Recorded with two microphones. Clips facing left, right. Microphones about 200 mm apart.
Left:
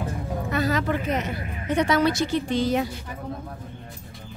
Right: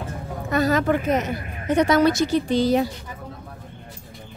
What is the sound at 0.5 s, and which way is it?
A woman's voice, 45° right (ahead or behind).